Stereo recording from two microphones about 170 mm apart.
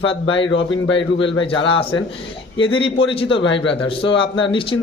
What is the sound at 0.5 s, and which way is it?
Speech, 90° left.